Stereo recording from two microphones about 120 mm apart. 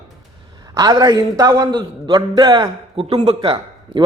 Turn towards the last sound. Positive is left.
turn(degrees=-45)  # may be behind; listen again after turning